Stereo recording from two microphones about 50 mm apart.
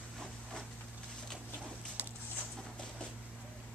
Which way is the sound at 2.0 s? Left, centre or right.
Right.